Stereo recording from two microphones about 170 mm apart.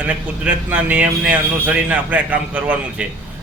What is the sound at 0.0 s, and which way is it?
A man's voice, 10° right (ahead or behind).